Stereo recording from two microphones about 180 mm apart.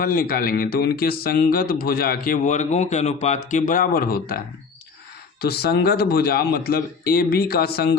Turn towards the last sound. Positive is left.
turn(degrees=60)  # may be behind; listen again after turning